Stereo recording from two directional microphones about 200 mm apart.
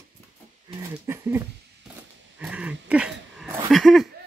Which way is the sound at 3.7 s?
Centre (ahead or behind).